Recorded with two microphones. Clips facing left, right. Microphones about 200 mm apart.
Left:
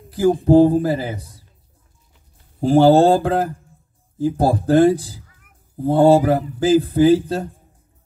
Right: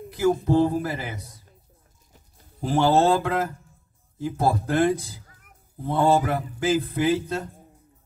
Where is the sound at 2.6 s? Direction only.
35° left (ahead or behind).